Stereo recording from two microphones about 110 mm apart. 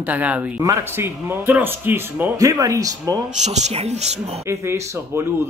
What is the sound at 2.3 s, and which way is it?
Speech, 30° right (ahead or behind).